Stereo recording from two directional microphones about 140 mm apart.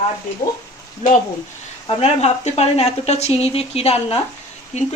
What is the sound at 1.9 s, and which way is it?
Speech, 50° left (ahead or behind).